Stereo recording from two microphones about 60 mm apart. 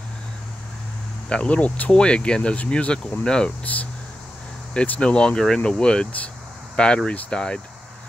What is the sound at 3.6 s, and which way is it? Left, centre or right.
Speech, left.